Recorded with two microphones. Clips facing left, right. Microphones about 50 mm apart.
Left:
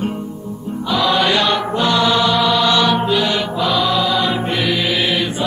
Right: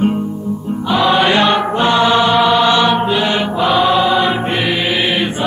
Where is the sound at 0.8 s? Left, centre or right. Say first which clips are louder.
Right 3 dB; right.